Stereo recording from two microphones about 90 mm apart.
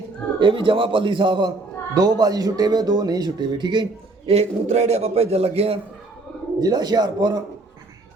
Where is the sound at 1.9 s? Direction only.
45° right (ahead or behind); by 4.3 s 60° right (ahead or behind).